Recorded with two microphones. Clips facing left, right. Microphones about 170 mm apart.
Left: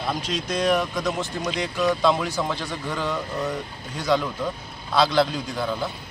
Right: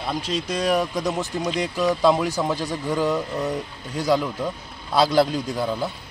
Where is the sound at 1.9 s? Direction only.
10° right (ahead or behind).